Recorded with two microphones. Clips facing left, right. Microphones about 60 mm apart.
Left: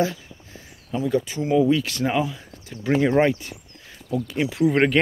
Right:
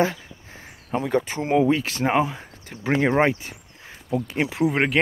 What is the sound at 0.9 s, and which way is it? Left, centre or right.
Speech, right.